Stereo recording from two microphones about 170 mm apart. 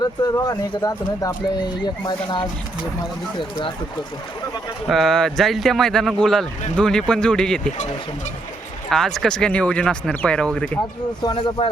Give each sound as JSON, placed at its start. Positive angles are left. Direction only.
{"t": 0.0, "sound": "speech", "side_deg": 20}
{"t": 4.9, "sound": "speech", "side_deg": 0}
{"t": 8.9, "sound": "speech", "side_deg": 5}
{"t": 11.4, "sound": "speech", "side_deg": 25}